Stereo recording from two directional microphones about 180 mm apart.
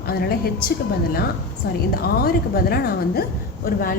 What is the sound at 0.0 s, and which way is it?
Speech, 60° left (ahead or behind).